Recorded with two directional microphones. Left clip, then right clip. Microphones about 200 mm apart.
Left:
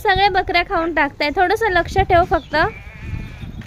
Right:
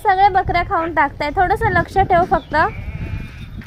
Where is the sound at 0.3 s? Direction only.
25° left (ahead or behind).